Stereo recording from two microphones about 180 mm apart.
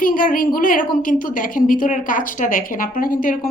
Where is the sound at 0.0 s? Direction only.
50° left (ahead or behind).